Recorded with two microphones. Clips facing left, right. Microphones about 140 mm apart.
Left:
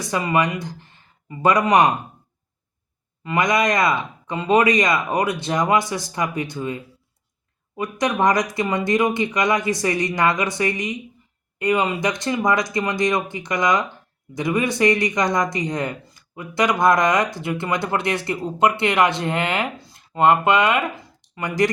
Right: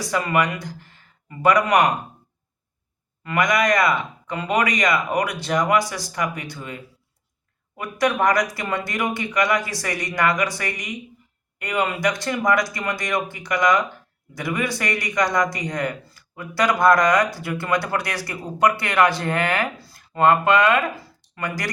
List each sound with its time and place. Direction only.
0.1 s speech: 20° left (ahead or behind)
3.2 s speech: 20° left (ahead or behind)
7.8 s speech: 20° left (ahead or behind)